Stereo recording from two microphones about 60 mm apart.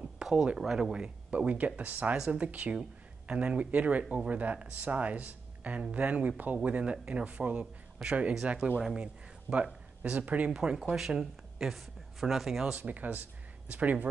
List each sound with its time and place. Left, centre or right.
0.0 s a sound: centre
0.6 s speech: centre; by 2.1 s right
2.1 s speech: centre
2.4 s speech: right
10.5 s speech: centre
12.7 s speech: right